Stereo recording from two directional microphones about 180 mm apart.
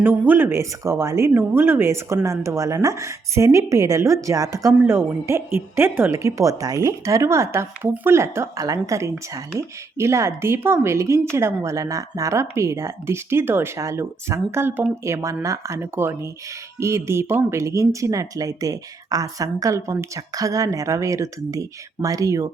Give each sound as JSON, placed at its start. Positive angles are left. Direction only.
{"t": 0.0, "sound": "speech", "side_deg": -10}